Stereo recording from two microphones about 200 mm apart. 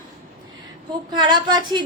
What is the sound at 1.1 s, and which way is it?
Speech, 20° right (ahead or behind).